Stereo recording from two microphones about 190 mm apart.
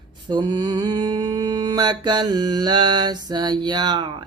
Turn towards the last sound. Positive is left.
turn(degrees=-25)  # may be behind; listen again after turning